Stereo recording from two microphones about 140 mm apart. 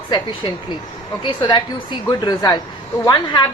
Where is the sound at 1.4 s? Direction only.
30° left (ahead or behind).